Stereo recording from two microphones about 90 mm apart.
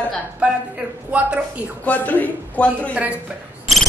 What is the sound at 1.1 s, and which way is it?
Speech, 15° right (ahead or behind).